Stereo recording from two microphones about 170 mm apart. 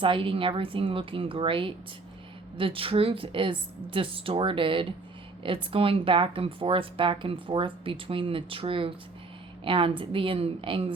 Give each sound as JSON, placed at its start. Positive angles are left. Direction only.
{"t": 0.0, "sound": "speech", "side_deg": -30}